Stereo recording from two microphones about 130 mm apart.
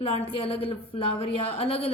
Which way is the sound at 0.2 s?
45° left (ahead or behind).